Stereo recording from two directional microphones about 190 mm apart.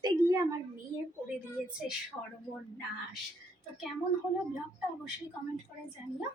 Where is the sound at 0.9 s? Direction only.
10° right (ahead or behind).